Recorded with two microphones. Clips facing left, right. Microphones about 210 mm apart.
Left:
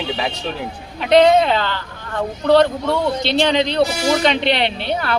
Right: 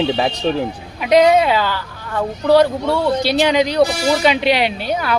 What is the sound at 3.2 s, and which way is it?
Speech, 5° right (ahead or behind).